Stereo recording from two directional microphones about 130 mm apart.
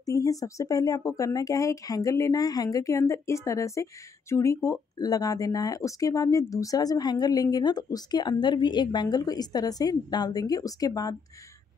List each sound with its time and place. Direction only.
0.0 s speech: 25° left (ahead or behind)